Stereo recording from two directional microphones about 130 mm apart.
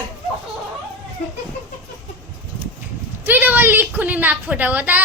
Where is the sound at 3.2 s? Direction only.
15° right (ahead or behind).